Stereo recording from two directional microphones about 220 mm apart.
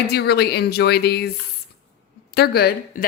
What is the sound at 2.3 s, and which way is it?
Speech, 45° left (ahead or behind).